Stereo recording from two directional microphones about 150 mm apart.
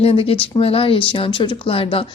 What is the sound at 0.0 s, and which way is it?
Speech, 40° left (ahead or behind).